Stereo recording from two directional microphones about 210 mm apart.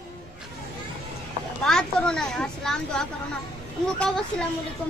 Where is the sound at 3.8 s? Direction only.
5° left (ahead or behind).